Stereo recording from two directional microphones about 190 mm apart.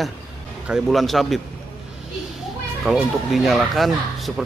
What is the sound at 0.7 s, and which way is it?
Speech, centre (ahead or behind).